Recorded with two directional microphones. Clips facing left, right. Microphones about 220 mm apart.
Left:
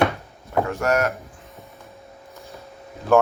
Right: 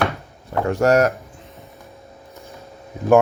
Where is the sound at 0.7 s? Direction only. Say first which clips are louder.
Right 8 dB; 30° right (ahead or behind).